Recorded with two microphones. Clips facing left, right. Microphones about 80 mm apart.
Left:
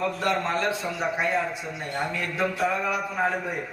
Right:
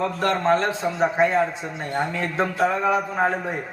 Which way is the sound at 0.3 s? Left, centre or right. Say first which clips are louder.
Right 6 dB; right.